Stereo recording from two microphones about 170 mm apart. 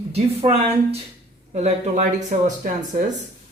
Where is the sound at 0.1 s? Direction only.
35° right (ahead or behind).